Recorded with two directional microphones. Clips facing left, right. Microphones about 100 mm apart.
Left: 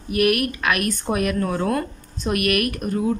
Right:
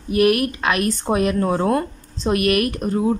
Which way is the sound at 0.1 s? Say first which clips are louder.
Right 3 dB; 25° right (ahead or behind).